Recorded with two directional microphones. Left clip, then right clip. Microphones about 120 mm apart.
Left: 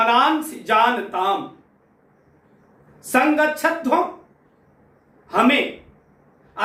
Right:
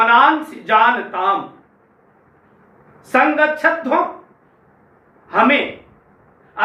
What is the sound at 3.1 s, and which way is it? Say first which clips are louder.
Speech: right 3 dB; 35° left (ahead or behind).